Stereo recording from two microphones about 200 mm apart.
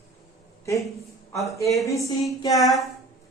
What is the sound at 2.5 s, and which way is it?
Speech, centre (ahead or behind).